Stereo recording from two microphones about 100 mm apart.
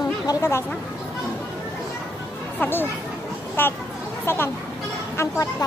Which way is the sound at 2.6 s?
20° left (ahead or behind).